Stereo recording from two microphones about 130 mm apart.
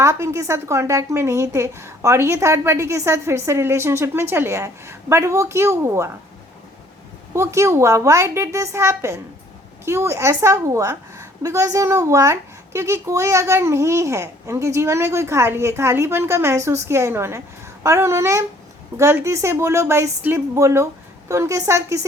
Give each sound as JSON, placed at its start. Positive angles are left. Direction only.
{"t": 0.0, "sound": "a woman's voice", "side_deg": -20}
{"t": 7.3, "sound": "a woman's voice", "side_deg": -20}